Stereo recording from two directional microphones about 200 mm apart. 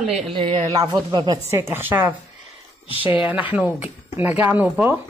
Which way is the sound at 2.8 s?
25° left (ahead or behind).